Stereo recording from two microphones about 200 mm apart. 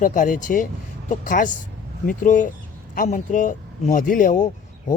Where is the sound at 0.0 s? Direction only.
40° left (ahead or behind).